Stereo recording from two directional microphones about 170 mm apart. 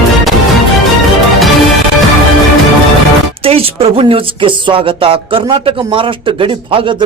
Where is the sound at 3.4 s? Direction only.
35° right (ahead or behind).